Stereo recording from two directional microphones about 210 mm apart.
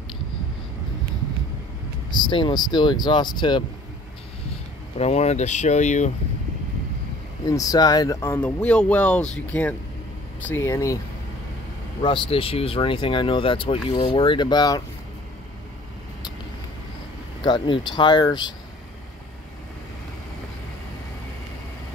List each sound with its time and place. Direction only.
2.2 s speech: 20° left (ahead or behind)
4.9 s speech: 30° left (ahead or behind)
7.4 s speech: 15° left (ahead or behind)
12.0 s speech: 25° left (ahead or behind)
17.4 s speech: 25° left (ahead or behind)